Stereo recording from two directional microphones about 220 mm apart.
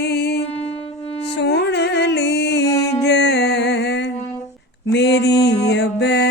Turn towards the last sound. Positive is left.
turn(degrees=50)  # may be behind; listen again after turning